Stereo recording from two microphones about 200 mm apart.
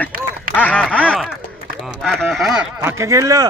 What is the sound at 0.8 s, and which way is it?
Speech, 5° left (ahead or behind).